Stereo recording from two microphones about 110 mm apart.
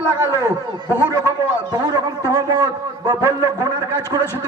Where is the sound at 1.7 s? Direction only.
35° right (ahead or behind).